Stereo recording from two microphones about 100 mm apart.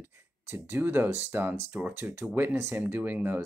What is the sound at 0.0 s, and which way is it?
Speech, 20° right (ahead or behind).